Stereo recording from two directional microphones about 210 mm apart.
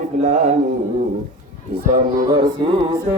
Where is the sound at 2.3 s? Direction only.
25° right (ahead or behind).